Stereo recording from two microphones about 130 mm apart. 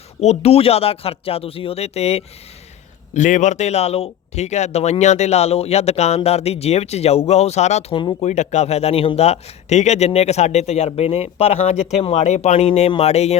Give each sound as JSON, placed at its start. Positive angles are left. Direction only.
{"t": 0.2, "sound": "speech", "side_deg": 55}
{"t": 3.2, "sound": "speech", "side_deg": 70}